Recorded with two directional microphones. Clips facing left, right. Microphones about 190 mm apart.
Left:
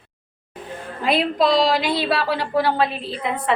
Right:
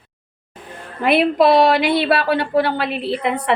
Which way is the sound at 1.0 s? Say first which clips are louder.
Right 5 dB; 65° right (ahead or behind).